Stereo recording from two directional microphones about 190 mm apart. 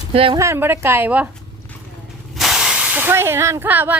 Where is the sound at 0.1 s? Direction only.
30° right (ahead or behind).